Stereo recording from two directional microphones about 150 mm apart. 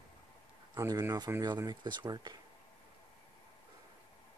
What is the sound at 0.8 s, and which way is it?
Speech, 20° right (ahead or behind).